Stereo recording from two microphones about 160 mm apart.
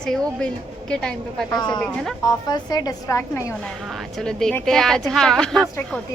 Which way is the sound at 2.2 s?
25° left (ahead or behind).